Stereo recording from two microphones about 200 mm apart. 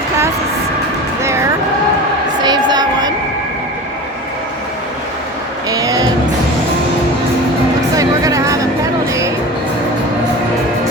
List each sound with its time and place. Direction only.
1.2 s a sound: 15° right (ahead or behind)
5.6 s music: 20° right (ahead or behind)
7.9 s music: 15° right (ahead or behind)